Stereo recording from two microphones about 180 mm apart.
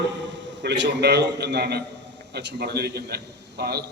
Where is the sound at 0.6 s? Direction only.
75° right (ahead or behind).